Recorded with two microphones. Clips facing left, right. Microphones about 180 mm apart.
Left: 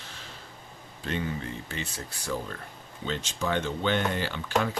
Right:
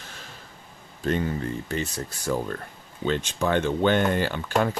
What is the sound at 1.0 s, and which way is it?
Speech, 45° right (ahead or behind).